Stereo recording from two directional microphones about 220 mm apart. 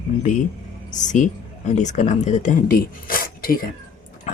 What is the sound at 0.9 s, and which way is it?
Speech, 35° left (ahead or behind).